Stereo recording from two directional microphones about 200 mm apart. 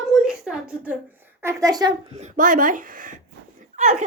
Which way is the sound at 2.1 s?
35° right (ahead or behind).